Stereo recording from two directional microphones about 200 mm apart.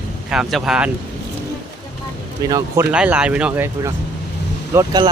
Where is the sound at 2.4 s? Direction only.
15° right (ahead or behind).